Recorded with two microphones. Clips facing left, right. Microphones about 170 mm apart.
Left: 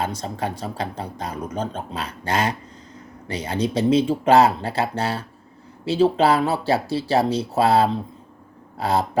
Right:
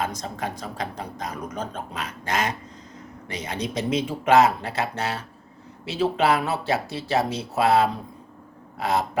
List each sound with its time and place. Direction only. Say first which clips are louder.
0.0 s speech: left 3 dB; 30° left (ahead or behind)